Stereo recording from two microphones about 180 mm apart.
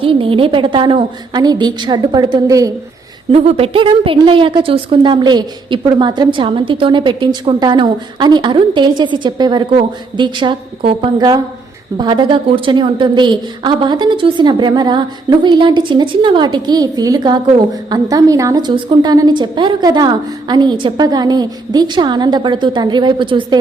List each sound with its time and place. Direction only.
0.0 s a woman's voice: 30° right (ahead or behind)
3.3 s a woman's voice: 30° right (ahead or behind)